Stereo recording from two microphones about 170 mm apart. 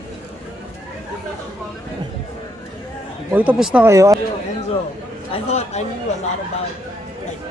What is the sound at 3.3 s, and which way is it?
Speech, 10° right (ahead or behind).